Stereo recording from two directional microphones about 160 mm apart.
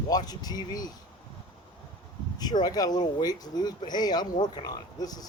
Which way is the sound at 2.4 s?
25° left (ahead or behind).